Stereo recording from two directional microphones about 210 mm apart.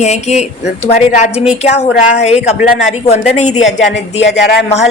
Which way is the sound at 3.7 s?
60° left (ahead or behind).